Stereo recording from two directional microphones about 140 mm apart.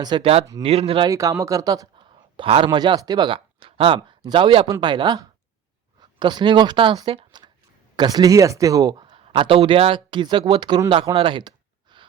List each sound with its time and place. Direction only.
0.0 s speech: 30° right (ahead or behind)
0.6 s speech: 45° right (ahead or behind)
1.1 s speech: 25° right (ahead or behind)
11.1 s a sound: 40° right (ahead or behind)